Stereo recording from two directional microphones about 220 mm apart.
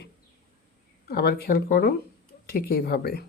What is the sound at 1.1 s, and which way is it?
Speech, 45° left (ahead or behind).